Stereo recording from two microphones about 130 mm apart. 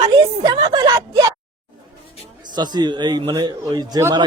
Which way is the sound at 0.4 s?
30° right (ahead or behind).